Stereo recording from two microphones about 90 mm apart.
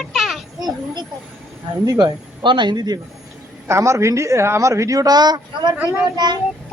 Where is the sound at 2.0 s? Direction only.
60° right (ahead or behind).